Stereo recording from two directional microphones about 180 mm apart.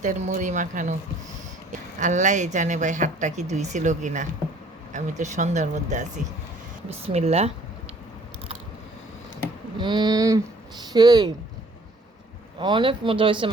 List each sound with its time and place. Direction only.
0.0 s speech: 45° right (ahead or behind)
2.0 s speech: 45° right (ahead or behind)
9.7 s speech: 25° right (ahead or behind)
12.5 s speech: 25° right (ahead or behind)